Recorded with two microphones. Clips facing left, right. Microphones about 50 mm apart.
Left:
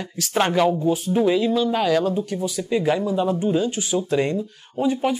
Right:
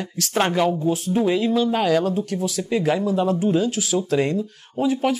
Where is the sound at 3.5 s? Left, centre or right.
Right.